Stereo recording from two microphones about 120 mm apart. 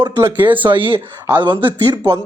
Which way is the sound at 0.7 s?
45° right (ahead or behind).